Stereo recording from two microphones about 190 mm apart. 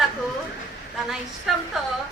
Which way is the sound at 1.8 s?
Centre (ahead or behind).